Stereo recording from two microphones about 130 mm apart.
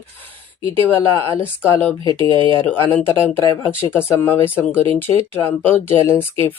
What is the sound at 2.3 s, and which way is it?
Speech, 40° right (ahead or behind).